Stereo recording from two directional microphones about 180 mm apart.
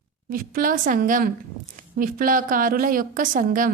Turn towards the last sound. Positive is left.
turn(degrees=-50)  # may be behind; listen again after turning